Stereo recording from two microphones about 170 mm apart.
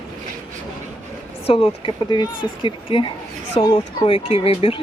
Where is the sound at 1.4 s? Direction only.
30° left (ahead or behind).